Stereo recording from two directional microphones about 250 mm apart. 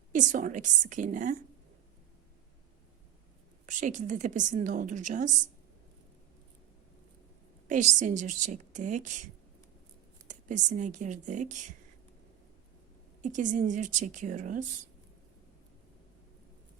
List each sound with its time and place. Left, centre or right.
0.1 s a woman's voice: right
3.7 s a woman's voice: right
7.7 s a woman's voice: right
10.2 s a woman's voice: right
13.2 s a woman's voice: right